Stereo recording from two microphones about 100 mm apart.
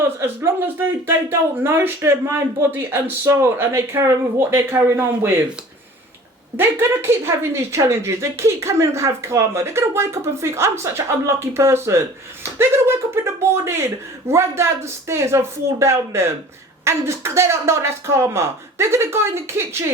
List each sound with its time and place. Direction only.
1.0 s speech: 25° right (ahead or behind)
6.6 s speech: 25° right (ahead or behind)